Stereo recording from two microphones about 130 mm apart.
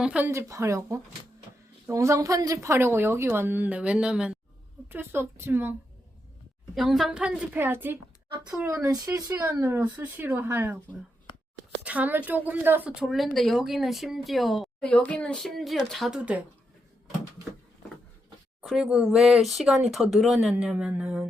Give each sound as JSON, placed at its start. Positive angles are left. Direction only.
{"t": 0.0, "sound": "speech", "side_deg": -10}
{"t": 0.3, "sound": "speech", "side_deg": -20}
{"t": 4.9, "sound": "speech", "side_deg": -20}
{"t": 6.7, "sound": "speech", "side_deg": 0}
{"t": 9.3, "sound": "speech", "side_deg": -15}
{"t": 11.8, "sound": "speech", "side_deg": -10}
{"t": 18.6, "sound": "speech", "side_deg": 0}